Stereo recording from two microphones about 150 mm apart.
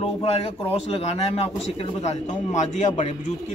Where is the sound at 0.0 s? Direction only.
40° left (ahead or behind).